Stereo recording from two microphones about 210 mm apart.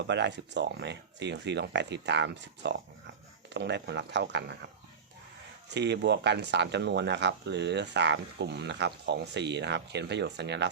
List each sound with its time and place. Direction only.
0.1 s speech: 55° right (ahead or behind)
5.6 s speech: 55° right (ahead or behind)